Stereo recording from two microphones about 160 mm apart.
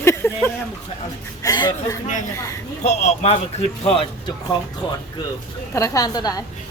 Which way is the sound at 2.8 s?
40° left (ahead or behind).